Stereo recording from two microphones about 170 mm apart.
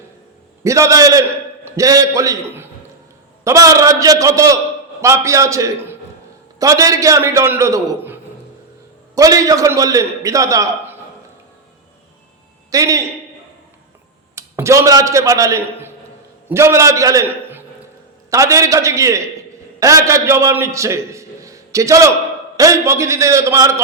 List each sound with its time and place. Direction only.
0.6 s a man's voice: 20° right (ahead or behind)
12.7 s a man's voice: 20° right (ahead or behind)
14.3 s a man's voice: 15° right (ahead or behind)